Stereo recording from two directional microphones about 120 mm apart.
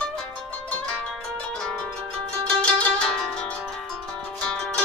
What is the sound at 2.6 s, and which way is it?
Music, 10° left (ahead or behind).